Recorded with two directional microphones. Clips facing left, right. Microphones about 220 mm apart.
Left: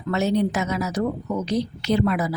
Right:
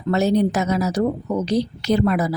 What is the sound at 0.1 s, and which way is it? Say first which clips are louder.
A woman's voice: right 4 dB; 35° right (ahead or behind).